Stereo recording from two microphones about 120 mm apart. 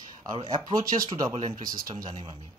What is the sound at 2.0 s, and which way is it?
Speech, 45° right (ahead or behind).